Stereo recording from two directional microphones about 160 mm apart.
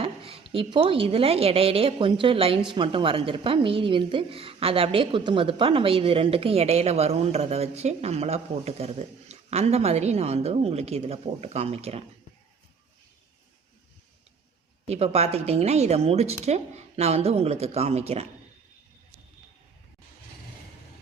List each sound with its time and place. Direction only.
0.0 s a woman's voice: 35° right (ahead or behind)
14.8 s a woman's voice: 40° right (ahead or behind)